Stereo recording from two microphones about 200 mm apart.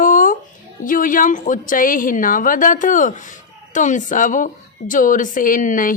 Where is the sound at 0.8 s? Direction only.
40° left (ahead or behind).